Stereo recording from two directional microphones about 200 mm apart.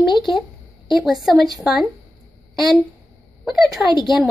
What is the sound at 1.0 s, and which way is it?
Speech, centre (ahead or behind).